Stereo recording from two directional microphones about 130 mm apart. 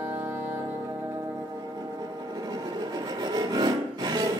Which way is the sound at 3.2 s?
30° right (ahead or behind).